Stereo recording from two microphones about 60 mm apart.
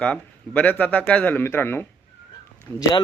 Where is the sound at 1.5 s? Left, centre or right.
Left.